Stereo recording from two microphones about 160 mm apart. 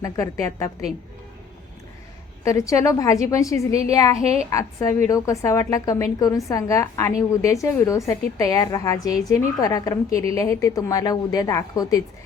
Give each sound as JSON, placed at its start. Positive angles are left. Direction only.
{"t": 0.0, "sound": "a woman's voice", "side_deg": 20}
{"t": 2.4, "sound": "a woman's voice", "side_deg": 20}